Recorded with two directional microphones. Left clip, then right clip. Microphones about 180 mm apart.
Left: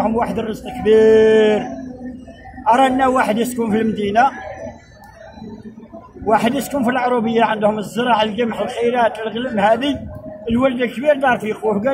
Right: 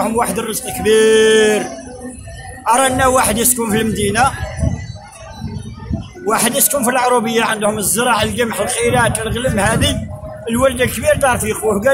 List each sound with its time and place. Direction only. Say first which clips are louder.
0.0 s a man's voice: right 2 dB; 35° right (ahead or behind)
2.7 s a man's voice: right 1 dB; 35° right (ahead or behind)
6.2 s a man's voice: even; 35° right (ahead or behind)